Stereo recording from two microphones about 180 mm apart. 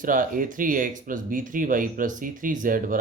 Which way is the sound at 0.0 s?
50° right (ahead or behind).